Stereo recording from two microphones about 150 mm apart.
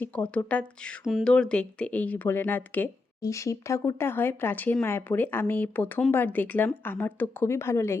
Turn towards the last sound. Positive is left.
turn(degrees=15)  # may be behind; listen again after turning